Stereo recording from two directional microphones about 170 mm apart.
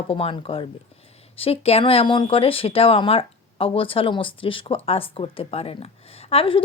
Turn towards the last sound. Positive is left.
turn(degrees=35)  # may be behind; listen again after turning